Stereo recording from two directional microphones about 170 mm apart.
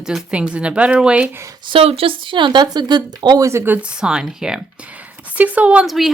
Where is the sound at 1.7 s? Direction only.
35° right (ahead or behind).